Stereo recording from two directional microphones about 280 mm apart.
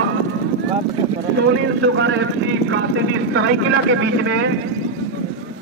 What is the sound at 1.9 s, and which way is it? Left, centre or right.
Speech, right.